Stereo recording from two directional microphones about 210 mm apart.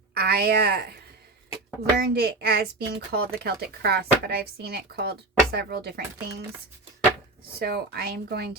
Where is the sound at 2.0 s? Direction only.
50° right (ahead or behind).